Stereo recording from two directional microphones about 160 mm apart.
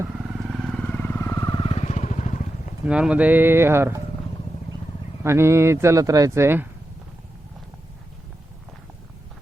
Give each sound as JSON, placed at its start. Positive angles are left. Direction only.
{"t": 0.6, "sound": "vehicle", "side_deg": 5}
{"t": 2.8, "sound": "speech", "side_deg": -5}
{"t": 5.2, "sound": "speech", "side_deg": -15}